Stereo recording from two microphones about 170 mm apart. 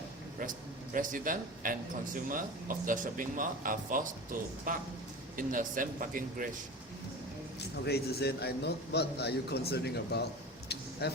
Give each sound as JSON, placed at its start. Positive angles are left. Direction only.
{"t": 0.9, "sound": "speech", "side_deg": -50}
{"t": 7.9, "sound": "a man's voice", "side_deg": 70}